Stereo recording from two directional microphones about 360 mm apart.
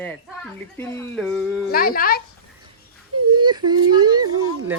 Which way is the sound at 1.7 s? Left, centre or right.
Left.